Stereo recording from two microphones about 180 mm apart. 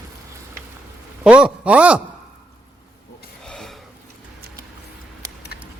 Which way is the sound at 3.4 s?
5° left (ahead or behind).